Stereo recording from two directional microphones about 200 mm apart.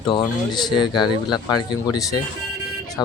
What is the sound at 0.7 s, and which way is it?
Speech, 20° left (ahead or behind).